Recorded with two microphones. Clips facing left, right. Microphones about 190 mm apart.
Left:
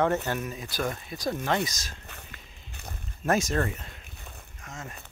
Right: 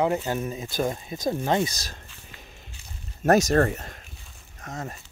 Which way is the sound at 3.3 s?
40° right (ahead or behind).